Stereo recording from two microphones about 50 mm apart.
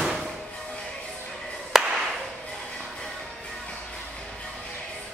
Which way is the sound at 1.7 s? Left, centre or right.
Centre.